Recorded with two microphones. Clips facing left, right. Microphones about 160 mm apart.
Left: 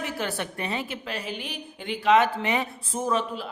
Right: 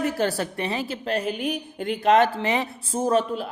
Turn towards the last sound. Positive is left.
turn(degrees=-45)  # may be behind; listen again after turning